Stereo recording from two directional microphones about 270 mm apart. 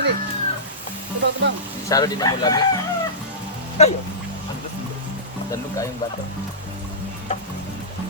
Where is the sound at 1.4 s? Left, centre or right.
Right.